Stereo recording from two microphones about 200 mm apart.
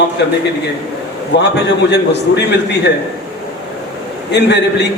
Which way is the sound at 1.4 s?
60° left (ahead or behind).